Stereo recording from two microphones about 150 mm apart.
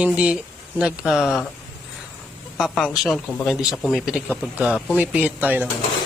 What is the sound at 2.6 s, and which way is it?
A man's voice, centre (ahead or behind).